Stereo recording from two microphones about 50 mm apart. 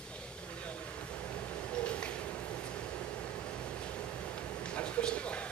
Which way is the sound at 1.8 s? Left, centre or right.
Left.